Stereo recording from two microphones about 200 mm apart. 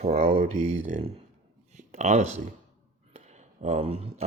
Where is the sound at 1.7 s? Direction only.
35° right (ahead or behind).